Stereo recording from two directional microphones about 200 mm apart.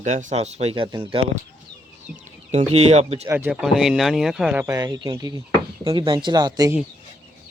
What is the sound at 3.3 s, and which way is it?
Speech, 10° right (ahead or behind).